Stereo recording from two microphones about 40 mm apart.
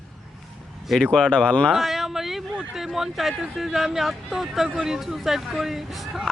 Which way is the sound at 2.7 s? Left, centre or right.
Centre.